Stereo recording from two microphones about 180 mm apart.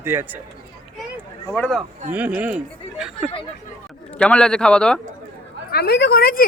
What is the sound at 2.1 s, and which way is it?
Speech, 10° right (ahead or behind).